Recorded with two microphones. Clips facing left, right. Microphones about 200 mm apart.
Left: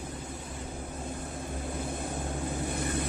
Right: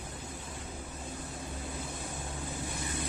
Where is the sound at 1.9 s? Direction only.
55° left (ahead or behind).